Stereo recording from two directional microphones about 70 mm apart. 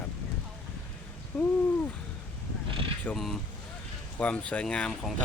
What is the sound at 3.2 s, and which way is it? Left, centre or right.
Speech, centre.